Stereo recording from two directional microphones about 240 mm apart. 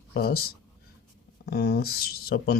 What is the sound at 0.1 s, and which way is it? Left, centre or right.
Speech, left.